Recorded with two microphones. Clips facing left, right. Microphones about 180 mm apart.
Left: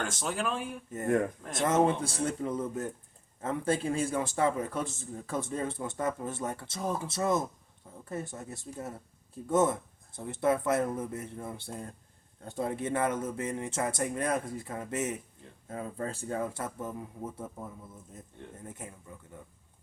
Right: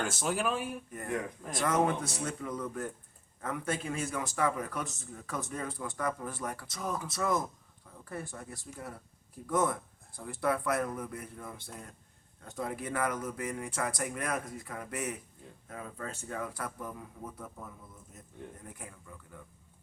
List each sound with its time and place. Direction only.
0.1 s speech: 5° right (ahead or behind)
1.0 s speech: 50° left (ahead or behind)
1.5 s a man's voice: 25° left (ahead or behind)